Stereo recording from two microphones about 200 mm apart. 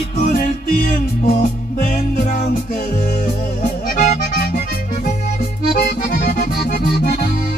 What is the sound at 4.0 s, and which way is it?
Accordion, 40° left (ahead or behind).